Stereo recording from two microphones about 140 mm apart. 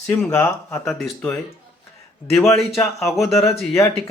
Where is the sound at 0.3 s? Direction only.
20° left (ahead or behind).